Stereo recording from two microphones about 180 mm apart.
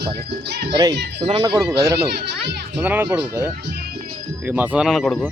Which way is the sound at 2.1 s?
70° right (ahead or behind).